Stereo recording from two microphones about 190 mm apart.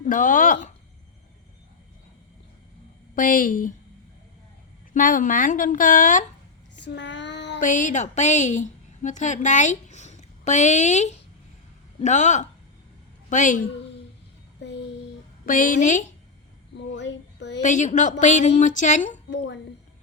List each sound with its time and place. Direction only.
0.0 s speech: 45° left (ahead or behind)
3.2 s speech: 45° left (ahead or behind)
4.9 s speech: 45° left (ahead or behind)
6.8 s child singing: 70° left (ahead or behind)
7.6 s a woman's voice: 40° left (ahead or behind)
14.6 s a sound: 65° left (ahead or behind)
15.4 s a woman's voice: 45° left (ahead or behind)
16.7 s child singing: 65° left (ahead or behind)
17.6 s a woman's voice: 40° left (ahead or behind)